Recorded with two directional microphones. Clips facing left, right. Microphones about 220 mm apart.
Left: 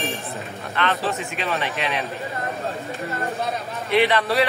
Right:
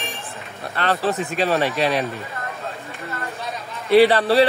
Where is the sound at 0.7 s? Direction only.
35° right (ahead or behind).